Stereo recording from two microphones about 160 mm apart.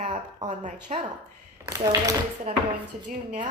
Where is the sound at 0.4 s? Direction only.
50° right (ahead or behind).